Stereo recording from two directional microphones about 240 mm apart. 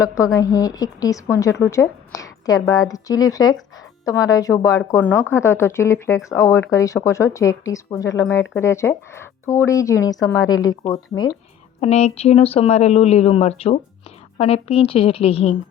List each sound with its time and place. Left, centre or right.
0.0 s speech: centre
1.7 s a sound: centre
2.6 s speech: centre
11.8 s speech: left